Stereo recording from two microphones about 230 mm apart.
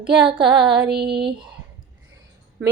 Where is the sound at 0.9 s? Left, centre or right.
Right.